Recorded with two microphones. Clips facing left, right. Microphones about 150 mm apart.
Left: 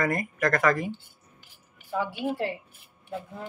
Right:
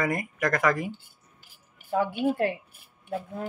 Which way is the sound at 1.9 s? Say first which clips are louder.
Right 4 dB; 50° right (ahead or behind).